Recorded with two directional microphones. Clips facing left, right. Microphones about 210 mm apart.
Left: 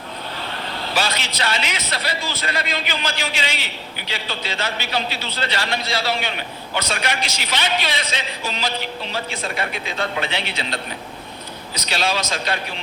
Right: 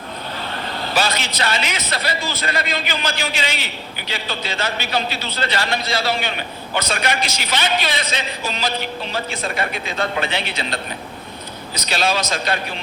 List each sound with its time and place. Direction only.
0.9 s a man's voice: 45° right (ahead or behind)